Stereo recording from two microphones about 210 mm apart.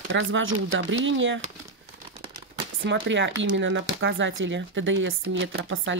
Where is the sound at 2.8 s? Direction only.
60° right (ahead or behind).